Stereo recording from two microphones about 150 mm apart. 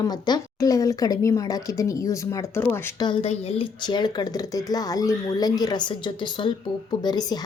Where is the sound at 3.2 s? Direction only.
40° left (ahead or behind).